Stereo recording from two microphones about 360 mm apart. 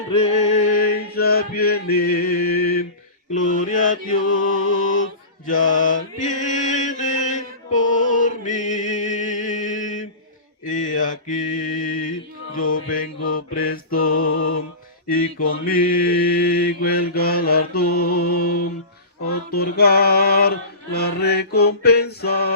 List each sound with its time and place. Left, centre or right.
0.1 s music: centre
3.3 s mantra: left
4.5 s music: left
4.8 s a sound: left
5.5 s mantra: left
15.4 s mantra: left